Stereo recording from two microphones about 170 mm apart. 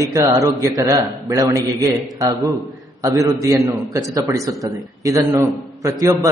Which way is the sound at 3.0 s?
20° right (ahead or behind).